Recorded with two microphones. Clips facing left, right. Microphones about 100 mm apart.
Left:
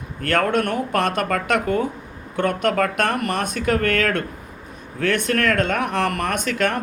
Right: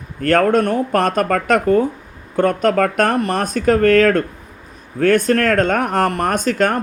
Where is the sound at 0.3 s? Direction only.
40° right (ahead or behind).